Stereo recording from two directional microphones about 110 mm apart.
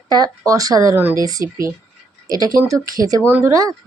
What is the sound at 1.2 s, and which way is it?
Speech, 30° right (ahead or behind).